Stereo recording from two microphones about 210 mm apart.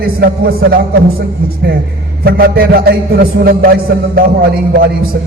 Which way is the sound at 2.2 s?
45° right (ahead or behind).